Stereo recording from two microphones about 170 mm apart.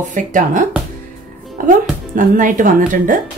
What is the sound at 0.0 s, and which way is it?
Speech, 50° right (ahead or behind).